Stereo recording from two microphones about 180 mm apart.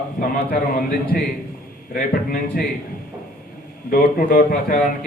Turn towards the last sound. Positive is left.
turn(degrees=50)  # may be behind; listen again after turning